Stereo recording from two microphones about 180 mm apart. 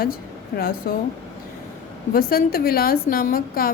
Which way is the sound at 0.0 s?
55° left (ahead or behind).